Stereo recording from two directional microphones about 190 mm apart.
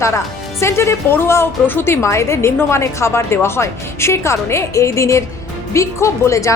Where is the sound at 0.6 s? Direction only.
15° left (ahead or behind).